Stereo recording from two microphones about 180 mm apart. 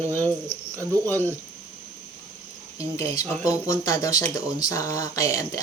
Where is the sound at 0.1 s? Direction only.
10° left (ahead or behind).